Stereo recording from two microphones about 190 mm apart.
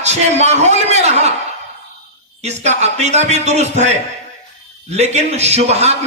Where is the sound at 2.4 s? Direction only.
35° right (ahead or behind).